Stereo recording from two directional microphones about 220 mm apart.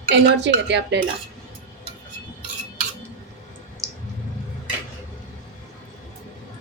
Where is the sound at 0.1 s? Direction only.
50° right (ahead or behind).